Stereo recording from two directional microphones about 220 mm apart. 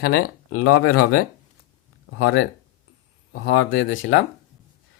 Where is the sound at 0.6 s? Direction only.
90° left.